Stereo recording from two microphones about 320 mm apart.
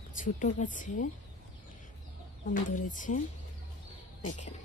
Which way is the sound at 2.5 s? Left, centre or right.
Left.